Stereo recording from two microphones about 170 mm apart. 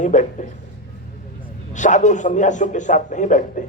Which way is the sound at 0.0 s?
45° left (ahead or behind).